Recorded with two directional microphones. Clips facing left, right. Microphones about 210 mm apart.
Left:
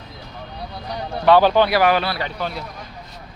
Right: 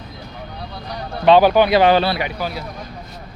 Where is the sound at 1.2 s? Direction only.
15° right (ahead or behind).